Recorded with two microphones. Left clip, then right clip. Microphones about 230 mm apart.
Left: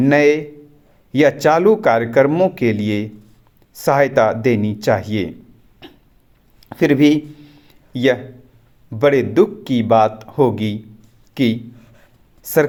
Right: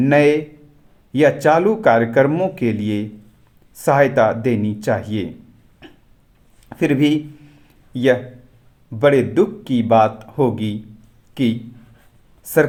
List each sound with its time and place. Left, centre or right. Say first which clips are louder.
0.0 s speech: left 1 dB; left
6.7 s a sound: left 4 dB; centre
8.9 s speech: even; left